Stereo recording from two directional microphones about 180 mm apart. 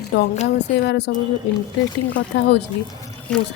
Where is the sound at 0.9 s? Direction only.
70° left (ahead or behind).